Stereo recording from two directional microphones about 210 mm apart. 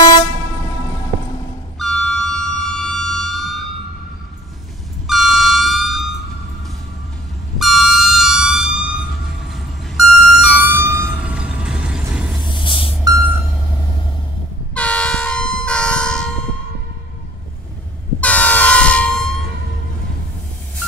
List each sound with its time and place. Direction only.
1.8 s siren: 5° left (ahead or behind)
5.0 s music: centre (ahead or behind)
7.5 s air horn: centre (ahead or behind)
12.5 s vehicle: 25° left (ahead or behind)
13.0 s a sound: 15° right (ahead or behind)
14.7 s vehicle horn: 5° left (ahead or behind)
18.2 s air horn: 5° left (ahead or behind)